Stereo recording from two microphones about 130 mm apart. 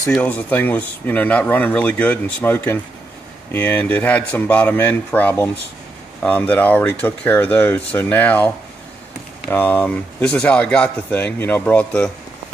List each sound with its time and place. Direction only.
0.1 s speech: 10° left (ahead or behind)
9.5 s speech: 15° left (ahead or behind)